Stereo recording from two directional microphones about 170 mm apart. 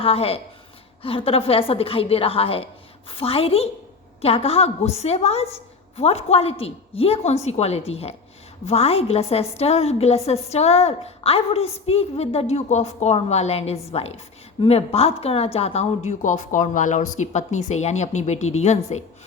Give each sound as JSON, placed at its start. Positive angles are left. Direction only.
{"t": 0.0, "sound": "a woman's voice", "side_deg": 35}